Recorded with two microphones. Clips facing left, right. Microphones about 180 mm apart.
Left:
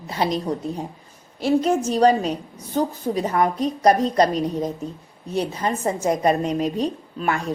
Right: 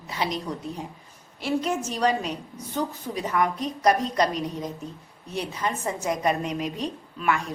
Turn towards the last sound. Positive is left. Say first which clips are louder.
# left 3 dB
turn(degrees=35)  # may be behind; listen again after turning